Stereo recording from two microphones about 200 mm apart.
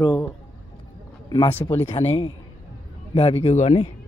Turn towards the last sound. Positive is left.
turn(degrees=35)  # may be behind; listen again after turning